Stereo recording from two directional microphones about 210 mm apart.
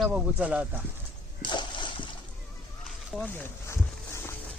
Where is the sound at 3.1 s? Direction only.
5° left (ahead or behind).